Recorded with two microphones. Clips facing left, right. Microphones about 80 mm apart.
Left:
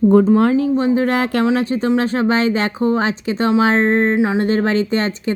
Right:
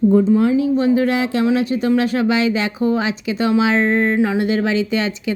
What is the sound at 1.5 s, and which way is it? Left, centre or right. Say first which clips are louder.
A woman's voice: even; left.